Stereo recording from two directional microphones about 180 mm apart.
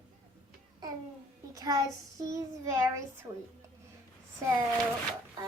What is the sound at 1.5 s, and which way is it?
A child's voice, 20° right (ahead or behind).